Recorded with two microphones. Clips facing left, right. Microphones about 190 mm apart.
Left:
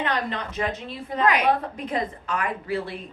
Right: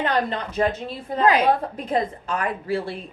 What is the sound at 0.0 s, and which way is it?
A woman's voice, 35° right (ahead or behind).